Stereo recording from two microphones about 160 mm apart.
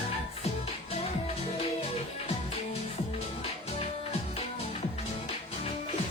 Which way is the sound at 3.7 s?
40° left (ahead or behind).